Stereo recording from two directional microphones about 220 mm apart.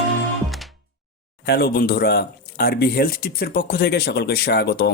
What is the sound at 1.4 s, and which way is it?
Speech, 45° left (ahead or behind).